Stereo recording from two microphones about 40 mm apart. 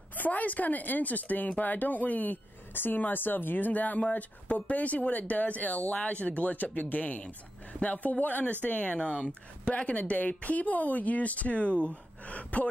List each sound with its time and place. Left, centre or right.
0.1 s speech: left
2.7 s speech: left
11.9 s gasp: left